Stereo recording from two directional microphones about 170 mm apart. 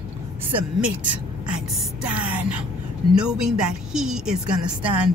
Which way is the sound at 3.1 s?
5° right (ahead or behind).